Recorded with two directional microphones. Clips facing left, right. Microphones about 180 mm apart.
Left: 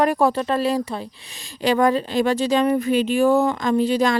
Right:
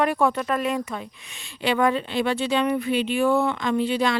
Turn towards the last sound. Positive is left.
turn(degrees=40)  # may be behind; listen again after turning